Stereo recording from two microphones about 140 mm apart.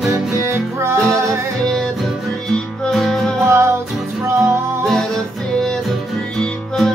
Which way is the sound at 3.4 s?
20° right (ahead or behind).